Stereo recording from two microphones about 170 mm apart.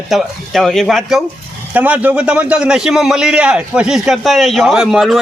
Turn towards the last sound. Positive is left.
turn(degrees=0)  # may be behind; listen again after turning